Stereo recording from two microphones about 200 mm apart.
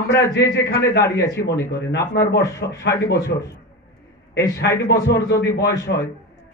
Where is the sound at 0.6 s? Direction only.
55° left (ahead or behind).